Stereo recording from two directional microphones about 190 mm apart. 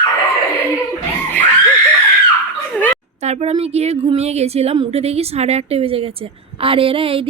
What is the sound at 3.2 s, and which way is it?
A woman's voice, 35° right (ahead or behind).